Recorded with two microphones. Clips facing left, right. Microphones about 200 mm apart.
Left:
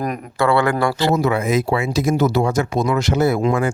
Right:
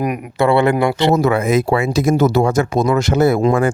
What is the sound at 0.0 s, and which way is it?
Speech, 15° right (ahead or behind).